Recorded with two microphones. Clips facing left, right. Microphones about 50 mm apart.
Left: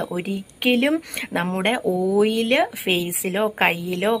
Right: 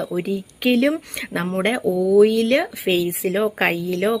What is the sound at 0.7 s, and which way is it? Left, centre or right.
A woman's voice, left.